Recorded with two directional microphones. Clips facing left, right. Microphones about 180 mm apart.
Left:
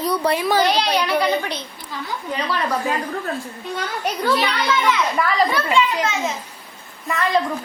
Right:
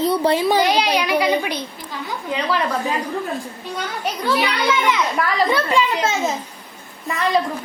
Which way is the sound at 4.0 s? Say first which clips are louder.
Even; 10° right (ahead or behind).